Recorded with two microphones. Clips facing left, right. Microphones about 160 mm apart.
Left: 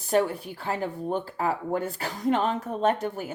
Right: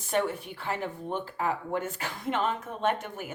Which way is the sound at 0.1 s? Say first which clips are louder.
Left 4 dB; 35° left (ahead or behind).